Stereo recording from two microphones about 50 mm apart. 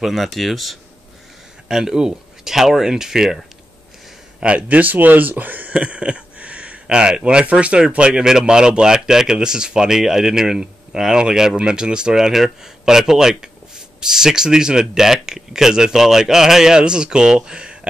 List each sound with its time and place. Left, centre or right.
0.0 s speech: centre
4.4 s speech: right